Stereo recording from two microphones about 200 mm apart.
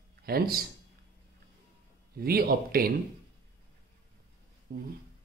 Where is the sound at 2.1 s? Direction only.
50° right (ahead or behind).